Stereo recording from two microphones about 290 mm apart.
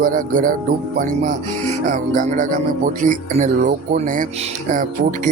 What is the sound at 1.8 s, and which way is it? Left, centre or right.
Speech, right.